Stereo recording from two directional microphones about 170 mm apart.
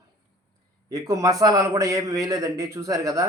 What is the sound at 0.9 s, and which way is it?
A man's voice, 20° right (ahead or behind).